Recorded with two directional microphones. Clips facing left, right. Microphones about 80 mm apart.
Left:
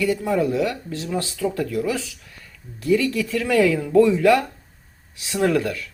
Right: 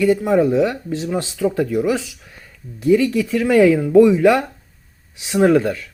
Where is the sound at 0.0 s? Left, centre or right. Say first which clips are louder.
Right 6 dB; right.